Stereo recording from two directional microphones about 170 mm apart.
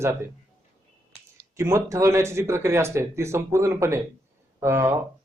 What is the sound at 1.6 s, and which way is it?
A man's voice, 15° right (ahead or behind).